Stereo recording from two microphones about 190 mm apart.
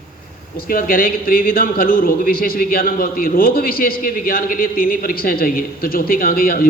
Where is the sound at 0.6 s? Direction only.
50° left (ahead or behind).